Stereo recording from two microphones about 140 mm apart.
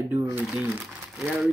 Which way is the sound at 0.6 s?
5° right (ahead or behind).